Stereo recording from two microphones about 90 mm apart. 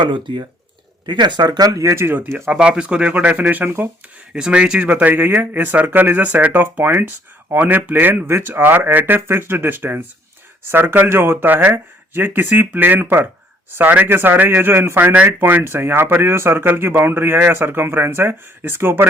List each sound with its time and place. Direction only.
0.0 s speech: 65° right (ahead or behind); by 2.5 s 25° right (ahead or behind)
2.5 s speech: 10° right (ahead or behind)
4.4 s speech: 10° right (ahead or behind)